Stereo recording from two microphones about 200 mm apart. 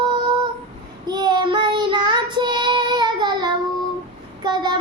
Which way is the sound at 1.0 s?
20° right (ahead or behind).